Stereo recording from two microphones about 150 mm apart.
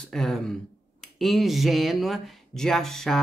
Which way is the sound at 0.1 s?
5° left (ahead or behind).